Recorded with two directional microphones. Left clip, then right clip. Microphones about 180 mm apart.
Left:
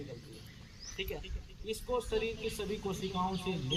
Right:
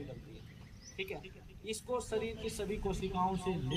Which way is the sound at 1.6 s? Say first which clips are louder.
Left 2 dB; centre (ahead or behind).